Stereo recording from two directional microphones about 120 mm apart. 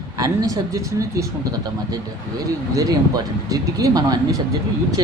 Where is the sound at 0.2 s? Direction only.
30° right (ahead or behind).